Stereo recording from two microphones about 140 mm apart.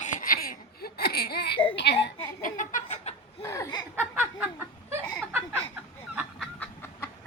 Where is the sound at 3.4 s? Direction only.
20° left (ahead or behind).